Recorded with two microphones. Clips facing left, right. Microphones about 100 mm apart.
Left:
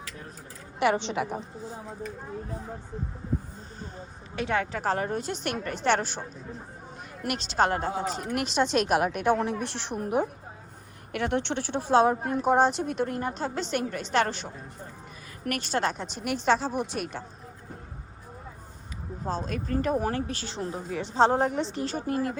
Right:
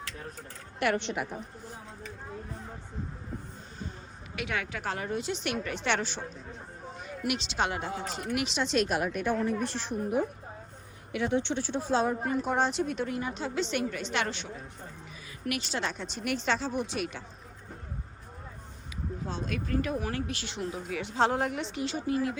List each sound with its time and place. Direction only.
0.8 s a woman's voice: 90° left
4.4 s speech: 30° left (ahead or behind)
6.1 s a sound: centre (ahead or behind)
7.3 s a woman's voice: 45° left (ahead or behind); by 9.6 s 90° left
9.6 s speech: 75° left (ahead or behind)
12.5 s a woman's voice: 45° left (ahead or behind)
16.0 s speech: 5° left (ahead or behind)
16.5 s a woman's voice: 45° left (ahead or behind)
19.2 s speech: 40° left (ahead or behind)